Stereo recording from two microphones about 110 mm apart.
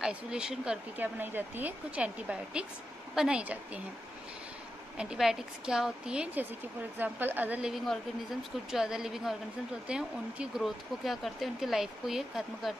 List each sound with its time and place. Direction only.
0.0 s speech: 5° right (ahead or behind)
4.9 s speech: 5° right (ahead or behind)
7.7 s speech: centre (ahead or behind)